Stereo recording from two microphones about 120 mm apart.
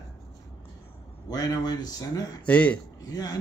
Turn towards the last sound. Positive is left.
turn(degrees=30)  # may be behind; listen again after turning